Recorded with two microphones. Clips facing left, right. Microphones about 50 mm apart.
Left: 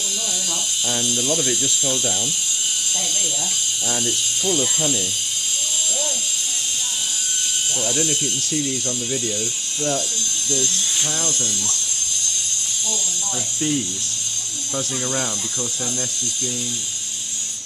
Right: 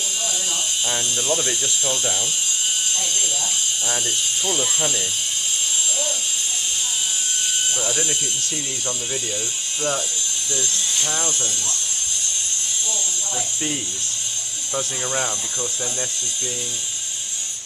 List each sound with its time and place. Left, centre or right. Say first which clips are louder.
0.8 s speech: left 1 dB; right
3.9 s speech: left 2 dB; right
7.8 s speech: left 5 dB; centre
9.8 s speech: left 1 dB; centre
13.6 s speech: left 4 dB; centre